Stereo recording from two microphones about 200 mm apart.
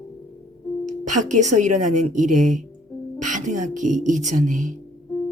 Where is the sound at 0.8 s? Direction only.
40° right (ahead or behind).